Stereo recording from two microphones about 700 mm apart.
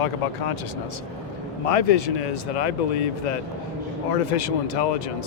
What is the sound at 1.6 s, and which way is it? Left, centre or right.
Speech, left.